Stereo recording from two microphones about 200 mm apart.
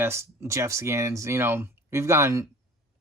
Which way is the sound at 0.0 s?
15° right (ahead or behind).